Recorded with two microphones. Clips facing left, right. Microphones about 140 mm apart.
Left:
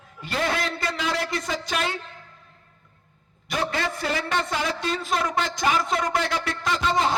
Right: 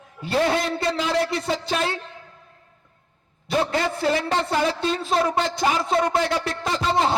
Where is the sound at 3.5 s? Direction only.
25° right (ahead or behind).